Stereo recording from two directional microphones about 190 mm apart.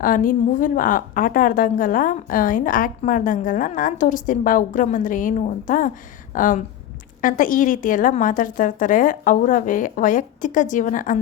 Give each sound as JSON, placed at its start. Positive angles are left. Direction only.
{"t": 0.0, "sound": "a woman's voice", "side_deg": 45}